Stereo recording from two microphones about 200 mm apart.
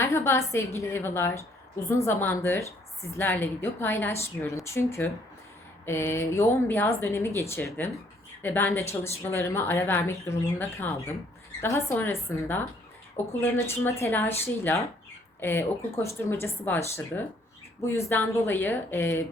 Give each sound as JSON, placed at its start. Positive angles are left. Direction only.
{"t": 0.0, "sound": "speech", "side_deg": 10}